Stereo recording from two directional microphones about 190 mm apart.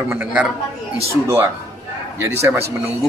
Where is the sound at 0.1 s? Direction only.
10° right (ahead or behind).